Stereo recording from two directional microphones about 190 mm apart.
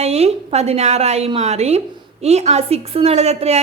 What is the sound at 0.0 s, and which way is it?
A woman's voice, 35° right (ahead or behind).